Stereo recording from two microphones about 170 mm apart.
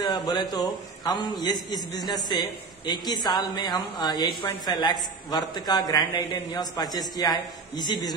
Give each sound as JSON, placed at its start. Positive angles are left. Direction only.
{"t": 0.0, "sound": "a man's voice", "side_deg": 25}